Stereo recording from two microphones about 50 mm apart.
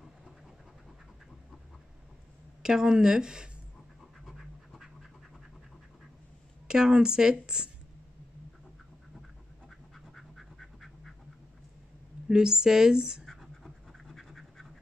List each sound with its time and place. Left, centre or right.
2.6 s speech: centre
4.3 s scratch: centre
6.7 s speech: centre
9.7 s duck: centre
12.3 s speech: centre
13.2 s scratch: centre